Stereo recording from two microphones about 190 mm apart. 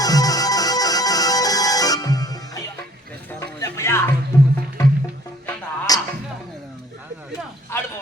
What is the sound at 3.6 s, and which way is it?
Music, 15° left (ahead or behind).